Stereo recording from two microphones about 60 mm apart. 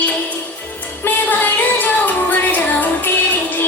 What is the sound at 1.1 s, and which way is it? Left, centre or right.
Music, left.